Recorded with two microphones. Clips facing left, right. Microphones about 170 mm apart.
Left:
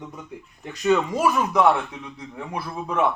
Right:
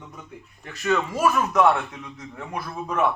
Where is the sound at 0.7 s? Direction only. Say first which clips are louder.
Left 4 dB; 15° left (ahead or behind).